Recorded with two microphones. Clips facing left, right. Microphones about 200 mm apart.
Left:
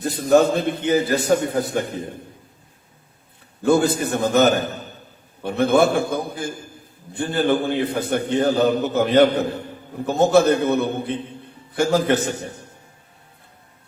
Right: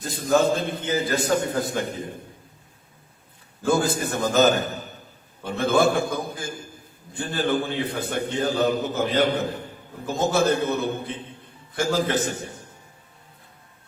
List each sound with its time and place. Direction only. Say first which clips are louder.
0.0 s a man's voice: left 5 dB; 65° left (ahead or behind)
3.7 s a man's voice: left 5 dB; 65° left (ahead or behind)